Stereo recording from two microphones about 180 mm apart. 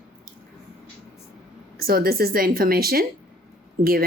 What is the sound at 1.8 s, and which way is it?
Speech, 55° right (ahead or behind).